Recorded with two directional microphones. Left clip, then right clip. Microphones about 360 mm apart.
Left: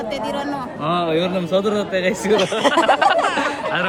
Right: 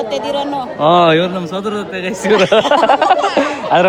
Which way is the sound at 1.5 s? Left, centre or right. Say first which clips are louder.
Left 1 dB; centre.